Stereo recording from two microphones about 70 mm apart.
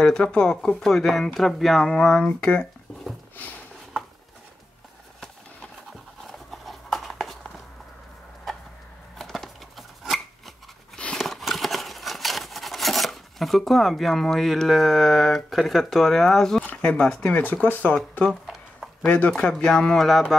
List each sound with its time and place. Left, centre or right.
0.0 s speech: centre
2.2 s speech: left
6.2 s a sound: centre
9.2 s a sound: centre
11.1 s rub: centre
17.4 s speech: left
19.0 s speech: left
19.4 s speech: centre